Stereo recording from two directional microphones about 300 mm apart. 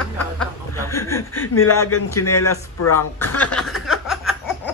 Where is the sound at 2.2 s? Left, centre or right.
Left.